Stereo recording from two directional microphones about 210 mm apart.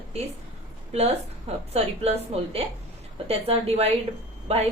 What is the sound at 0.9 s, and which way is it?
A woman's voice, 30° right (ahead or behind).